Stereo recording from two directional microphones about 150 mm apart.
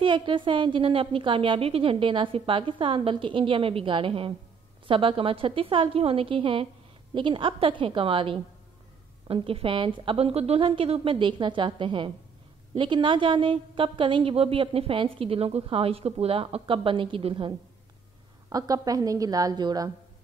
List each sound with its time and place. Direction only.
0.0 s a woman's voice: 35° right (ahead or behind)
18.5 s a woman's voice: 25° right (ahead or behind)